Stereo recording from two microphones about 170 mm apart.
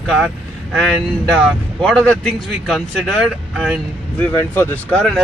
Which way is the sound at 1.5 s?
5° left (ahead or behind).